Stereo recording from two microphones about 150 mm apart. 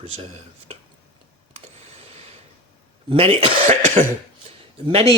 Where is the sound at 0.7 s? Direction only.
40° right (ahead or behind).